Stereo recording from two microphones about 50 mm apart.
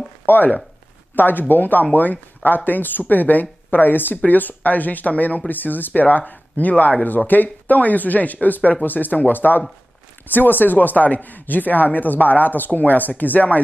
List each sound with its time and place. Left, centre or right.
1.1 s speech: left